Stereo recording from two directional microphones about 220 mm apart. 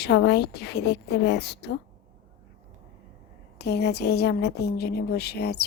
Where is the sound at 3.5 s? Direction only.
50° left (ahead or behind).